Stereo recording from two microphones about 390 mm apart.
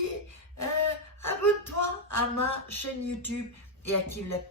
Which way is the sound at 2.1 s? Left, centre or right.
Left.